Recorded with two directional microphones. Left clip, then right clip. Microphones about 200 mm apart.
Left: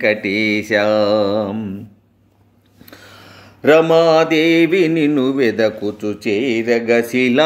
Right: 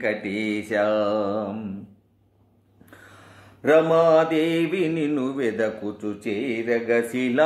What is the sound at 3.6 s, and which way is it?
Mantra, 40° left (ahead or behind).